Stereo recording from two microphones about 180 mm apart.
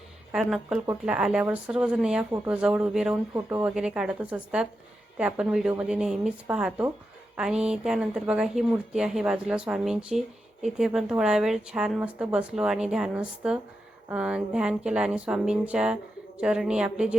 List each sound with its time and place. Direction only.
0.3 s speech: 5° right (ahead or behind)